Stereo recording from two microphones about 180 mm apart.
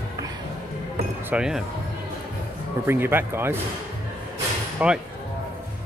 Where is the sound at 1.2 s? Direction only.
5° right (ahead or behind).